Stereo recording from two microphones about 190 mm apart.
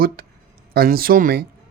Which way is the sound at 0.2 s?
50° right (ahead or behind).